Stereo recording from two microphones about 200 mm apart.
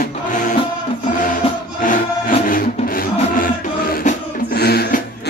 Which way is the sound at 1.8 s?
40° left (ahead or behind).